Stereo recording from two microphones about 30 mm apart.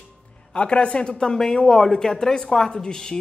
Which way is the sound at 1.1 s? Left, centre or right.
Left.